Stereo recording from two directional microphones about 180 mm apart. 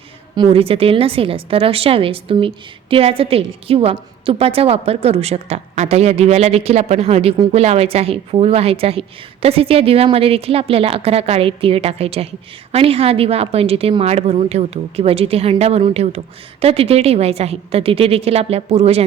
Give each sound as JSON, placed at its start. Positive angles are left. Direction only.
{"t": 0.3, "sound": "a woman's voice", "side_deg": -30}